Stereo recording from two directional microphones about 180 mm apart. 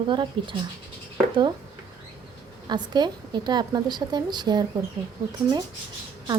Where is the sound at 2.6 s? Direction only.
25° right (ahead or behind).